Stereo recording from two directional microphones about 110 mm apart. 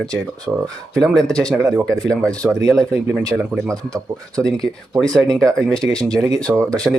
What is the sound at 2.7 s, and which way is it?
Speech, 5° left (ahead or behind).